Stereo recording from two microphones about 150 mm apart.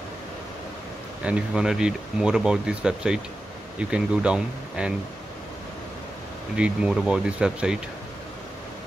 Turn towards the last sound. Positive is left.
turn(degrees=-5)  # may be behind; listen again after turning